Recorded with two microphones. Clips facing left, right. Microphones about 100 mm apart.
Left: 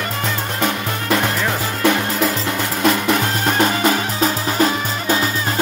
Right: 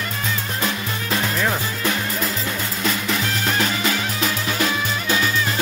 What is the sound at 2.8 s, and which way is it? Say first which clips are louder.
Music: left 7 dB; 60° left (ahead or behind).